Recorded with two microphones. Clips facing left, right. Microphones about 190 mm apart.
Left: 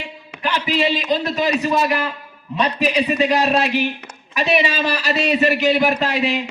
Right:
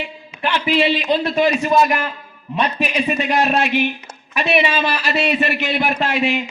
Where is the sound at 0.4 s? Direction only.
40° left (ahead or behind).